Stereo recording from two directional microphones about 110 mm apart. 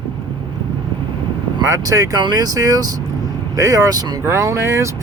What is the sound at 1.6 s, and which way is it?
Speech, 30° right (ahead or behind).